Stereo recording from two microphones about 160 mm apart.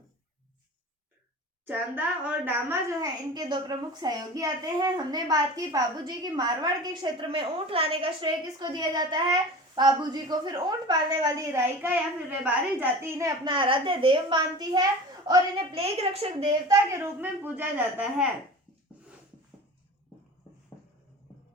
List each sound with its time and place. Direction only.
1.6 s a woman's voice: 10° right (ahead or behind)
3.0 s a child's voice: 25° right (ahead or behind)
15.7 s a woman's voice: 40° right (ahead or behind)
16.6 s a woman's voice: 20° right (ahead or behind)